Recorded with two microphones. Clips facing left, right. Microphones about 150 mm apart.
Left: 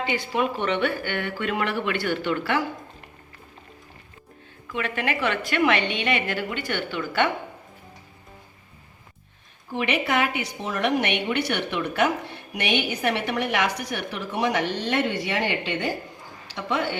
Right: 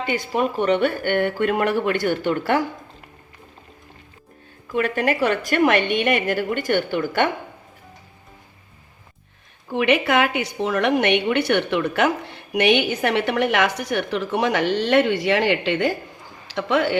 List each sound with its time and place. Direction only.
0.0 s speech: 45° right (ahead or behind)
4.7 s speech: 40° right (ahead or behind)
9.7 s a woman's voice: 65° right (ahead or behind)